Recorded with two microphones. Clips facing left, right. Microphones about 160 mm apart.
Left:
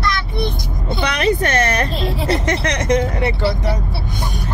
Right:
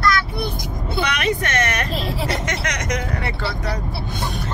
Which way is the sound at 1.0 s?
35° left (ahead or behind).